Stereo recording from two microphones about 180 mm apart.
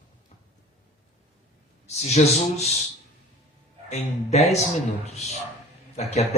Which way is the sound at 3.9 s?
35° left (ahead or behind).